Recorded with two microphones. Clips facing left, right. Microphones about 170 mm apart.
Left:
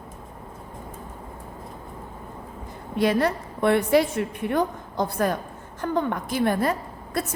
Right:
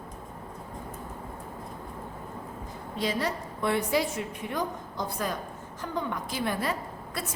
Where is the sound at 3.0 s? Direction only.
60° left (ahead or behind).